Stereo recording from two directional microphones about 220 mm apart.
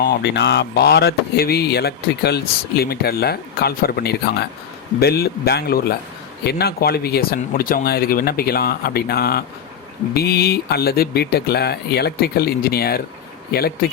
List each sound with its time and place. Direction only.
0.0 s speech: 50° left (ahead or behind)